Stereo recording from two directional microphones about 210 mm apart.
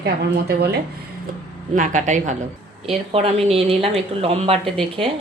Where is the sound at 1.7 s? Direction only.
35° right (ahead or behind).